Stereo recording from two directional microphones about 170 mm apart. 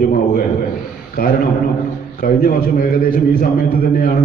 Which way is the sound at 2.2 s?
60° left (ahead or behind).